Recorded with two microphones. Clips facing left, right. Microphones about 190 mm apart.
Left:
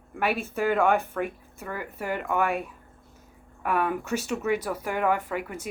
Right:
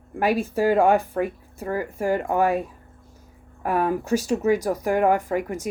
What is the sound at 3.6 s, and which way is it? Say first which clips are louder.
Speech: right 4 dB; 40° right (ahead or behind).